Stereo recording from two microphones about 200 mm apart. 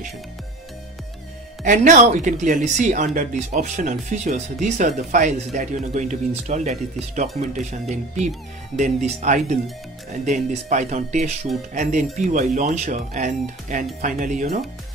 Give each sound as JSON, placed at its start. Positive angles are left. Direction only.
{"t": 1.6, "sound": "speech", "side_deg": -40}
{"t": 8.7, "sound": "speech", "side_deg": -35}